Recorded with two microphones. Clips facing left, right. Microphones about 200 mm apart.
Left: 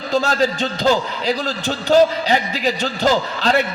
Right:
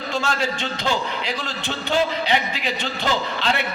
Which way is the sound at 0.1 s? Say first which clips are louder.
Left 7 dB; 40° left (ahead or behind).